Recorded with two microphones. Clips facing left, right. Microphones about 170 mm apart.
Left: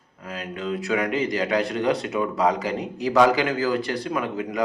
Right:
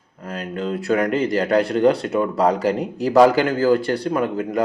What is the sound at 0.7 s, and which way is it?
Speech, 50° right (ahead or behind).